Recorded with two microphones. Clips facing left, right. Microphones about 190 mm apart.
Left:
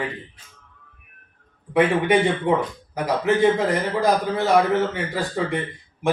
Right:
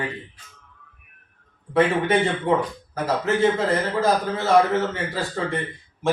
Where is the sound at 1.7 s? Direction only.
15° left (ahead or behind).